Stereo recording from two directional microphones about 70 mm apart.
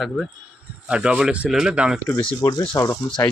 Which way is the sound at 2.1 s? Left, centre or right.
Left.